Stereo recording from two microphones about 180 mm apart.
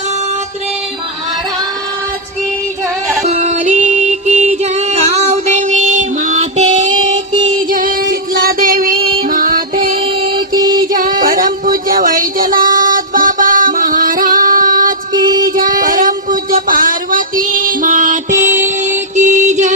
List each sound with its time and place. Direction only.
3.2 s music: 40° right (ahead or behind)
10.5 s music: 20° right (ahead or behind)
10.9 s a sound: 50° right (ahead or behind)
18.8 s music: 40° right (ahead or behind)